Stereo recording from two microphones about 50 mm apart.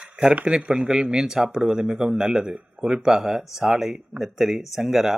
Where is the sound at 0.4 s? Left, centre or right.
Centre.